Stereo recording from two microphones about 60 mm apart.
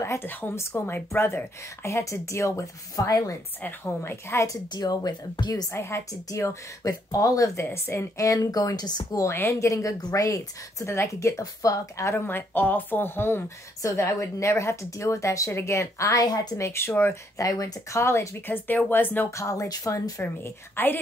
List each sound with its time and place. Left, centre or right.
0.0 s a woman's voice: left
3.6 s speech: left
4.5 s speech: left
5.7 s a woman's voice: left
6.8 s a woman's voice: left
7.7 s a woman's voice: left
9.3 s a woman's voice: left
12.3 s speech: left
13.8 s a woman's voice: left
16.6 s a woman's voice: left
17.4 s speech: left
17.9 s a woman's voice: left
18.9 s speech: left
19.3 s a woman's voice: left